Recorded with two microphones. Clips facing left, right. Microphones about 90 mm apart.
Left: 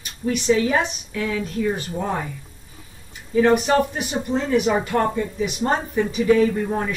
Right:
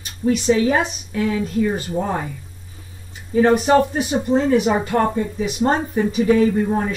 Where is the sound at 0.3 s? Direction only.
35° right (ahead or behind).